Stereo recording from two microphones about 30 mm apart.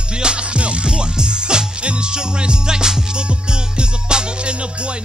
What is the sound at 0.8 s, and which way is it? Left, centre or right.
Music, right.